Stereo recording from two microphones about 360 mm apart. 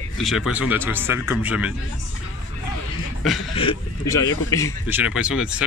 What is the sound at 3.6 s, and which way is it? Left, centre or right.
Speech, centre.